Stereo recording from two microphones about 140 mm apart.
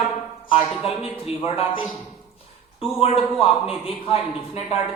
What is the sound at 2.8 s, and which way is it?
A man's voice, 45° left (ahead or behind).